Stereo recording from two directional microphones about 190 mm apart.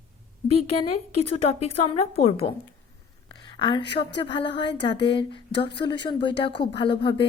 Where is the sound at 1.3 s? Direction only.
30° left (ahead or behind).